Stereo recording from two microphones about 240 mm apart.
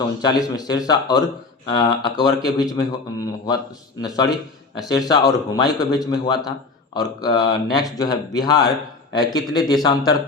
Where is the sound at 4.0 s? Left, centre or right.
Centre.